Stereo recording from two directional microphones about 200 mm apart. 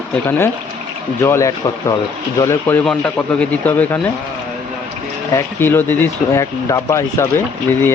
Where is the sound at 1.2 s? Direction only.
15° left (ahead or behind).